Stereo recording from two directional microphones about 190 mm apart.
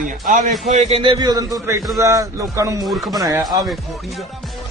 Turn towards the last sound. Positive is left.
turn(degrees=-20)  # may be behind; listen again after turning